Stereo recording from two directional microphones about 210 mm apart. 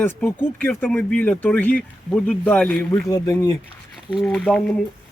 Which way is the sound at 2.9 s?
20° left (ahead or behind).